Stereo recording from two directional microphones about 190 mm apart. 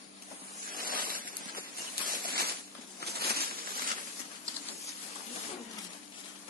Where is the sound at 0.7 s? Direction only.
50° right (ahead or behind).